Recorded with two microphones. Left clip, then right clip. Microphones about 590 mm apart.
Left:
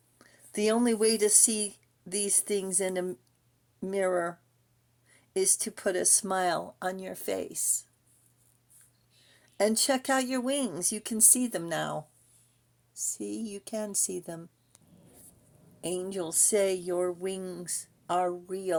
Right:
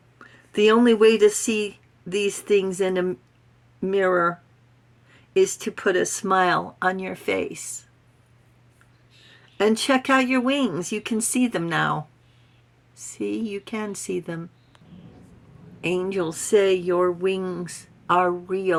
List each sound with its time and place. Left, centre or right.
0.7 s speech: left
5.4 s speech: left
9.6 s speech: left
15.9 s speech: left
17.7 s a sound: left